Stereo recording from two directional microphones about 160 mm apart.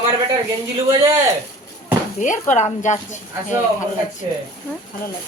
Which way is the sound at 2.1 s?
50° left (ahead or behind).